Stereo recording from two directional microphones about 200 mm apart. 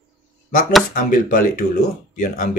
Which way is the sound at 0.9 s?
45° left (ahead or behind).